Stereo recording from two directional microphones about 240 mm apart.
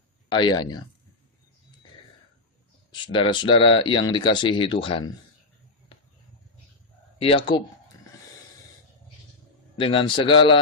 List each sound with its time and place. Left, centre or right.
0.3 s speech: centre
2.9 s speech: centre
7.2 s speech: left
9.7 s speech: left